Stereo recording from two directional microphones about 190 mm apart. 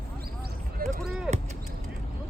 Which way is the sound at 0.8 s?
50° right (ahead or behind).